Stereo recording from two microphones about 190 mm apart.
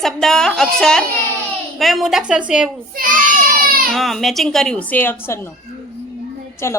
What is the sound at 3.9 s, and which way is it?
A woman's voice, centre (ahead or behind).